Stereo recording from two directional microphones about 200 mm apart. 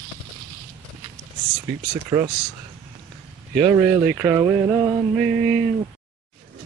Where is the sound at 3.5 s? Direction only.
10° right (ahead or behind).